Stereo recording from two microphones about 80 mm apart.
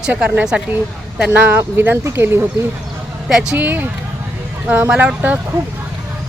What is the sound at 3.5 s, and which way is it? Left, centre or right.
Speech, right.